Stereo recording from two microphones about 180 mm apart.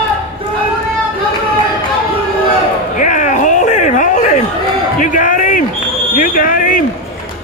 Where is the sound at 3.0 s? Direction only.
45° left (ahead or behind).